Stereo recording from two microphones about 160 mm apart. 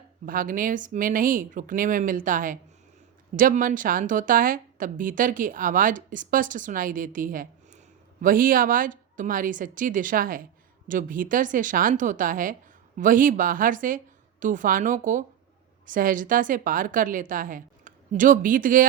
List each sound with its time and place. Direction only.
0.3 s a woman's voice: 60° right (ahead or behind)